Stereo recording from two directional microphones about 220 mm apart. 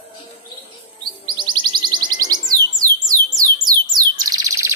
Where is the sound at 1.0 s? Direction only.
20° right (ahead or behind).